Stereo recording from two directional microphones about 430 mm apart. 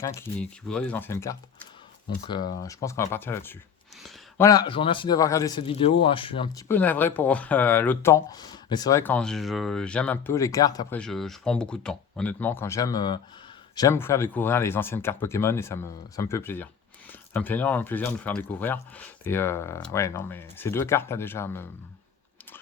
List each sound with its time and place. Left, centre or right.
0.0 s speech: centre